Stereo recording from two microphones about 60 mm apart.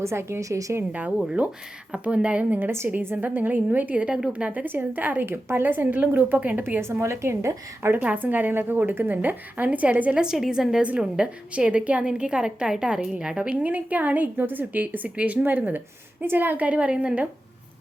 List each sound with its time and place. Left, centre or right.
0.0 s a woman's voice: right
1.4 s a woman's voice: right
2.4 s a woman's voice: right
5.2 s a woman's voice: right
8.0 s a woman's voice: right
10.2 s a woman's voice: centre; by 16.6 s right
16.6 s a woman's voice: right